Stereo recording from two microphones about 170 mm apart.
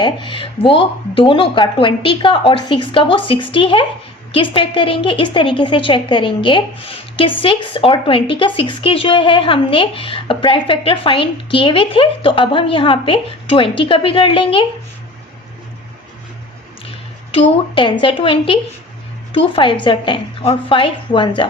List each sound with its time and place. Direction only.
0.0 s a woman's voice: 30° left (ahead or behind)
17.3 s a woman's voice: 30° left (ahead or behind)